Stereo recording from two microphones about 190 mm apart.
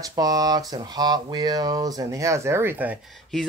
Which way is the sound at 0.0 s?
20° right (ahead or behind).